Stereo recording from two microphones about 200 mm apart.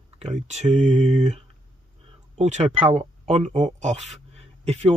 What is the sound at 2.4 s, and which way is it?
Speech, 35° right (ahead or behind).